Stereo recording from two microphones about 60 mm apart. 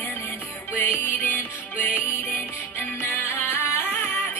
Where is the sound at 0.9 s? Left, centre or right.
Left.